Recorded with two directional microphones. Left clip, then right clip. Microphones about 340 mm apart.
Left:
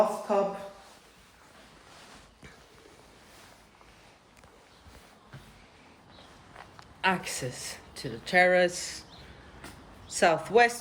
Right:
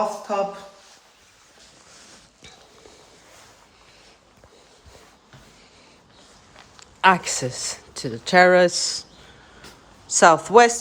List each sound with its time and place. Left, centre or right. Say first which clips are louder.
0.3 s speech: right 5 dB; centre
7.0 s speech: right 11 dB; centre
10.1 s speech: right 10 dB; centre